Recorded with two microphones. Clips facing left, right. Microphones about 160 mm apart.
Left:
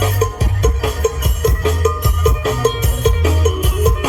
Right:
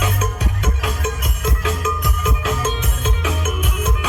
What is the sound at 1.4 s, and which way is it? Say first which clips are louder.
Music: left 9 dB; 40° left (ahead or behind).